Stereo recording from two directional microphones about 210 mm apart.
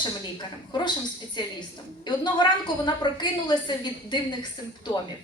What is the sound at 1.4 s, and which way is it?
A woman's voice, 20° left (ahead or behind).